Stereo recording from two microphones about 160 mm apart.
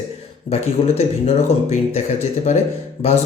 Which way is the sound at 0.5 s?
40° left (ahead or behind).